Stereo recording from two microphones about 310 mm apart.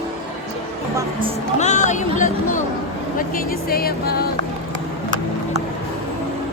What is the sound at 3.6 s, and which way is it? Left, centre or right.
Speech, left.